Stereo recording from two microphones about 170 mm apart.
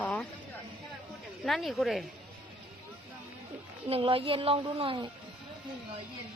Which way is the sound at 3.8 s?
35° right (ahead or behind).